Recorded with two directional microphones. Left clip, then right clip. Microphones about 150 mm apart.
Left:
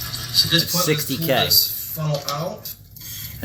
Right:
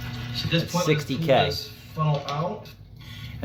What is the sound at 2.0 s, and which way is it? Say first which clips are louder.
Cutlery: left 2 dB; 15° left (ahead or behind).